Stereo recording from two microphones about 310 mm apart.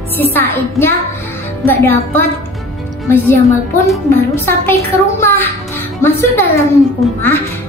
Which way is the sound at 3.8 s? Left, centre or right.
Centre.